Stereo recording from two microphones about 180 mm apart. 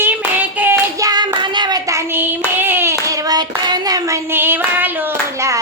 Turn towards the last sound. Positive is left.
turn(degrees=-10)  # may be behind; listen again after turning